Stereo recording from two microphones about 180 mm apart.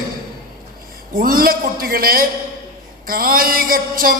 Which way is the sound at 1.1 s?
55° right (ahead or behind).